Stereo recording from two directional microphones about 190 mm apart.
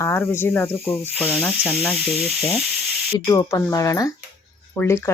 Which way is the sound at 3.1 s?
20° left (ahead or behind).